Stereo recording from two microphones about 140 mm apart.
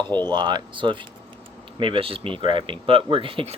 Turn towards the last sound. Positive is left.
turn(degrees=-40)  # may be behind; listen again after turning